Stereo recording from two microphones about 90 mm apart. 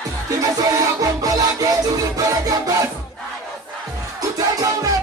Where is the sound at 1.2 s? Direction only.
40° right (ahead or behind).